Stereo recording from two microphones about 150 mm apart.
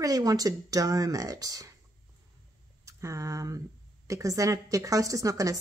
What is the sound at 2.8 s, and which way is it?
Speech, 20° right (ahead or behind).